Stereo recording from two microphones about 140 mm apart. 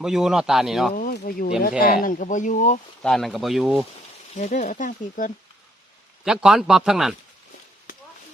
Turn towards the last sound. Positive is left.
turn(degrees=-5)  # may be behind; listen again after turning